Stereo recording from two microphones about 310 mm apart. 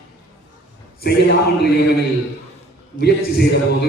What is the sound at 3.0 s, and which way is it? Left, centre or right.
Speech, left.